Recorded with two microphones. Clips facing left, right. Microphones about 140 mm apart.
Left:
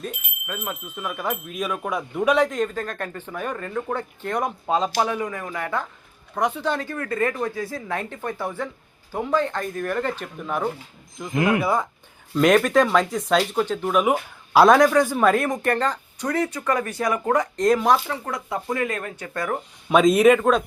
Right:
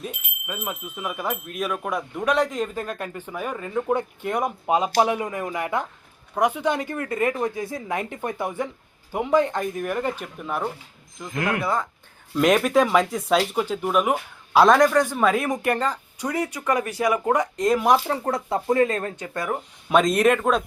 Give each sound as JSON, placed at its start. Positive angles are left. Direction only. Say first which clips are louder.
{"t": 0.0, "sound": "speech", "louder": "left 1 dB", "side_deg": -5}
{"t": 12.3, "sound": "speech", "louder": "left 1 dB", "side_deg": -5}
{"t": 18.1, "sound": "speech", "louder": "right 4 dB", "side_deg": -30}
{"t": 19.1, "sound": "speech", "louder": "even", "side_deg": -20}
{"t": 19.9, "sound": "speech", "louder": "left 3 dB", "side_deg": 5}